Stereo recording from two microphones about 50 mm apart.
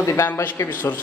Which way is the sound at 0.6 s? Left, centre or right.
Left.